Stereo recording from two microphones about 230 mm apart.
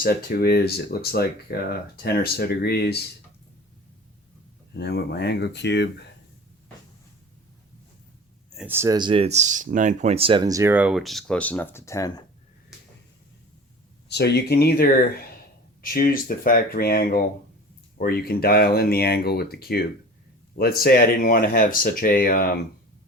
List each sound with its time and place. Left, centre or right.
0.0 s speech: left
4.7 s speech: left
8.5 s speech: centre
14.1 s speech: left